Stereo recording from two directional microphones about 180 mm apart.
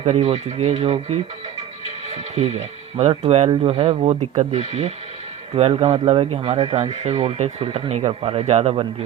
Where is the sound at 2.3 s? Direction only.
40° right (ahead or behind).